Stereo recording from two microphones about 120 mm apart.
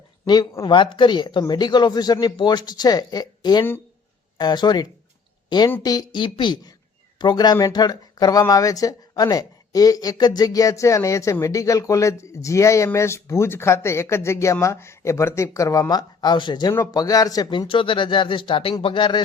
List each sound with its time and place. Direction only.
0.6 s a woman's voice: 40° left (ahead or behind)